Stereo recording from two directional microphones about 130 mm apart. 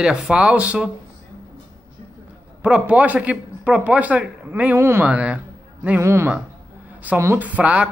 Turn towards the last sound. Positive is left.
turn(degrees=-10)  # may be behind; listen again after turning